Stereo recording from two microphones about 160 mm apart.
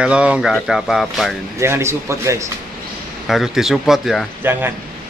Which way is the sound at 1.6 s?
15° right (ahead or behind).